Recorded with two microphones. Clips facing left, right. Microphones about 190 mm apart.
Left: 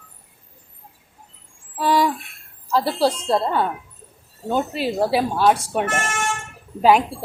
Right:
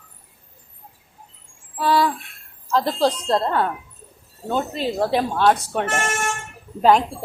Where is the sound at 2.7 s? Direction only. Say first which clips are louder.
Even; 10° left (ahead or behind).